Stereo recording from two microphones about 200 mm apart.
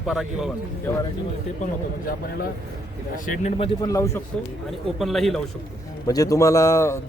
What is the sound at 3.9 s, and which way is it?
Speech, 15° left (ahead or behind).